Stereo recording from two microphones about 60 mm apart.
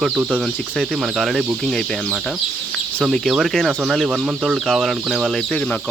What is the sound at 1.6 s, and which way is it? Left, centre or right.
Speech, centre.